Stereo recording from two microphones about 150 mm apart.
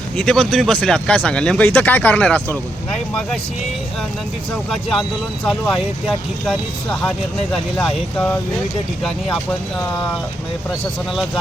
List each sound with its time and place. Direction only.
0.2 s speech: 5° left (ahead or behind)
4.7 s speech: centre (ahead or behind)